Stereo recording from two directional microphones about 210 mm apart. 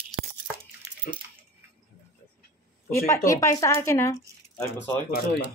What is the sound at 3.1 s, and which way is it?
Speech, 15° left (ahead or behind).